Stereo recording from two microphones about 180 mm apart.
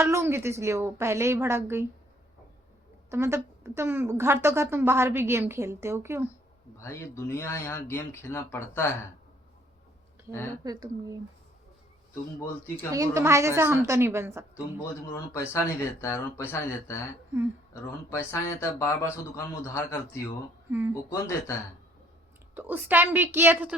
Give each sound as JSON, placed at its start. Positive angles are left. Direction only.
{"t": 0.0, "sound": "a woman's voice", "side_deg": -15}
{"t": 3.1, "sound": "a woman's voice", "side_deg": -15}
{"t": 6.7, "sound": "speech", "side_deg": 15}
{"t": 10.6, "sound": "a woman's voice", "side_deg": -20}
{"t": 12.9, "sound": "a woman's voice", "side_deg": -15}
{"t": 15.1, "sound": "speech", "side_deg": 15}
{"t": 18.1, "sound": "speech", "side_deg": 15}
{"t": 20.7, "sound": "speech", "side_deg": -10}
{"t": 21.1, "sound": "speech", "side_deg": 15}
{"t": 22.5, "sound": "a woman's voice", "side_deg": -10}